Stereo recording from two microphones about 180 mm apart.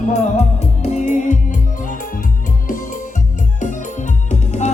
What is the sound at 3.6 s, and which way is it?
Music, 45° left (ahead or behind).